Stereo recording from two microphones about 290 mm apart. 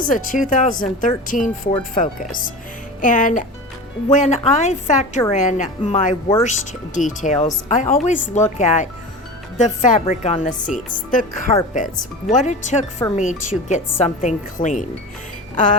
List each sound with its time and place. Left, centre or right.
0.0 s speech: left